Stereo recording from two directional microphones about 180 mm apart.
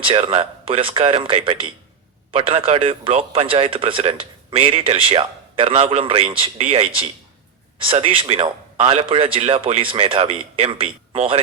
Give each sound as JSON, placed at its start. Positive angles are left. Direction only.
{"t": 0.0, "sound": "speech", "side_deg": -30}